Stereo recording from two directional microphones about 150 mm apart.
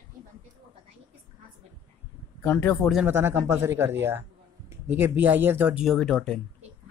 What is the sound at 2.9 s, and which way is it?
Speech, 15° right (ahead or behind).